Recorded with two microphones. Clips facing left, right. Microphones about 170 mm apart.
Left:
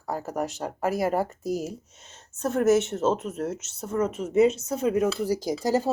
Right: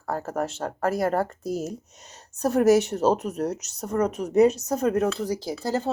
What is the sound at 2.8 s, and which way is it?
Speech, centre (ahead or behind).